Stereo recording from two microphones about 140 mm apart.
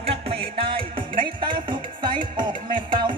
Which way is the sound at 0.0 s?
40° right (ahead or behind).